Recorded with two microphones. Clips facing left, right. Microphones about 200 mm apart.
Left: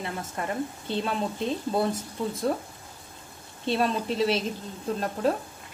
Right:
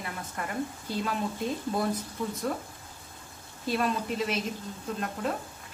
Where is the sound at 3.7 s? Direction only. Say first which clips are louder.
Left 3 dB; 30° left (ahead or behind).